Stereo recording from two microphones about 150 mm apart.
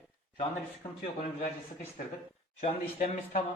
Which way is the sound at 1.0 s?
40° left (ahead or behind).